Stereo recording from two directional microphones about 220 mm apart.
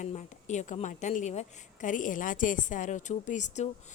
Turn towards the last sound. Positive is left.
turn(degrees=35)  # may be behind; listen again after turning